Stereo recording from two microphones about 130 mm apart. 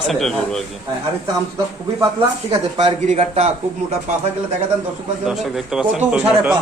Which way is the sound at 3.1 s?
60° right (ahead or behind).